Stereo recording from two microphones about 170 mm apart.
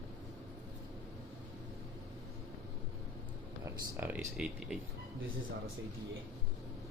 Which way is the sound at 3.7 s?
10° right (ahead or behind).